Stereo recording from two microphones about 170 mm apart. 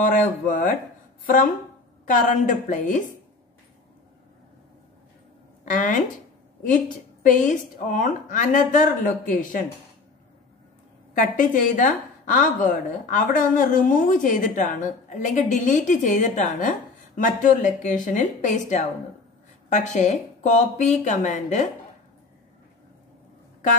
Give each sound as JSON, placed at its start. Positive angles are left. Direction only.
{"t": 0.0, "sound": "a woman's voice", "side_deg": 50}
{"t": 5.7, "sound": "a woman's voice", "side_deg": 50}
{"t": 7.2, "sound": "a woman's voice", "side_deg": 50}
{"t": 11.1, "sound": "a woman's voice", "side_deg": 50}